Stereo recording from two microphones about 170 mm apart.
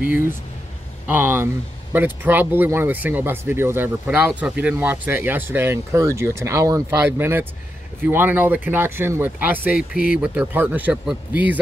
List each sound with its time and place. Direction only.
1.0 s speech: 10° right (ahead or behind)